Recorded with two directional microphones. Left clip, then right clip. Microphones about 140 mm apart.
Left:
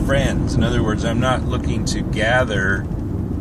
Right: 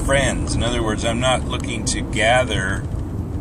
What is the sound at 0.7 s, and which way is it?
Speech, 15° right (ahead or behind).